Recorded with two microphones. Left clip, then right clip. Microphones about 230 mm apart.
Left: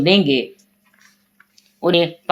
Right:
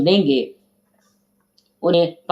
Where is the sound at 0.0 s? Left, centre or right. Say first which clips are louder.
Left 1 dB; left.